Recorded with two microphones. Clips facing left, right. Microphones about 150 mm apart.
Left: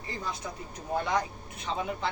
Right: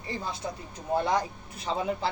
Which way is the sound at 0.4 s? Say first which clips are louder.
Right 4 dB; 30° right (ahead or behind).